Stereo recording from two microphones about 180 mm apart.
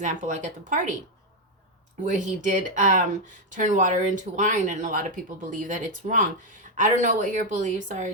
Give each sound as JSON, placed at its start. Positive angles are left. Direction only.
{"t": 0.0, "sound": "speech", "side_deg": -45}
{"t": 2.0, "sound": "speech", "side_deg": -45}